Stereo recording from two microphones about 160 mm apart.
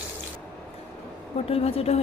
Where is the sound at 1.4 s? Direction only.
40° left (ahead or behind).